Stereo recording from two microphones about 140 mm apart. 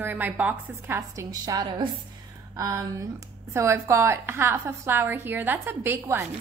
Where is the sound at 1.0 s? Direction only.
25° right (ahead or behind).